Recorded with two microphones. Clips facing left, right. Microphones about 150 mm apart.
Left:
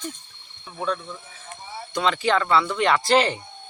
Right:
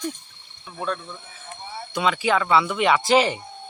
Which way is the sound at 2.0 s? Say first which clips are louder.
Even; 5° right (ahead or behind).